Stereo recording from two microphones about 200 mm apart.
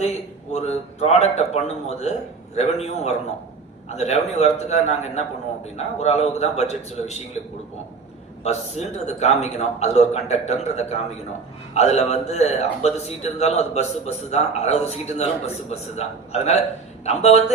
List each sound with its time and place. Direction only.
0.5 s a man's voice: 35° left (ahead or behind)
8.4 s a man's voice: 35° left (ahead or behind)